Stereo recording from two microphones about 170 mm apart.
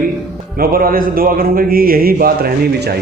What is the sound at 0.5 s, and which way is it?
Speech, 60° right (ahead or behind).